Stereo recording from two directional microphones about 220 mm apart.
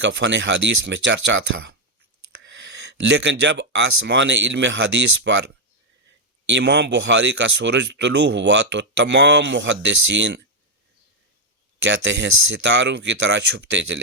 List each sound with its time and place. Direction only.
0.0 s speech: 55° right (ahead or behind)
11.8 s speech: 55° right (ahead or behind)